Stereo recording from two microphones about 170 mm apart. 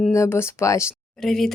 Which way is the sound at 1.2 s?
Centre (ahead or behind).